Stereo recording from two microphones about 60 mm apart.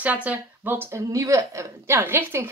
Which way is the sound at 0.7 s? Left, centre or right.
Right.